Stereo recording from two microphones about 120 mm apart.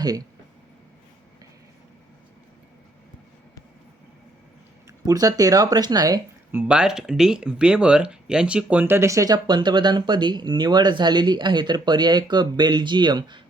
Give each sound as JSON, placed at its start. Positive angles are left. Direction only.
{"t": 4.9, "sound": "speech", "side_deg": -30}
{"t": 6.5, "sound": "speech", "side_deg": -15}